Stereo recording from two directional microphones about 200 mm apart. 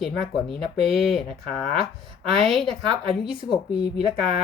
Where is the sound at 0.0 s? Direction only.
Centre (ahead or behind).